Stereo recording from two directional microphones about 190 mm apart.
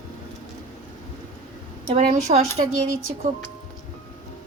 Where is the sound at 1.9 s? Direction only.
35° right (ahead or behind).